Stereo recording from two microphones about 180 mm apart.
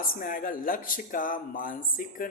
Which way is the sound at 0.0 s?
50° left (ahead or behind).